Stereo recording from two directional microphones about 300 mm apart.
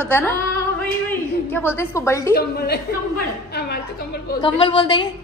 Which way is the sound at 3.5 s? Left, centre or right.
Left.